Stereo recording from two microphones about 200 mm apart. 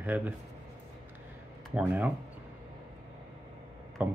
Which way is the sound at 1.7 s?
10° right (ahead or behind).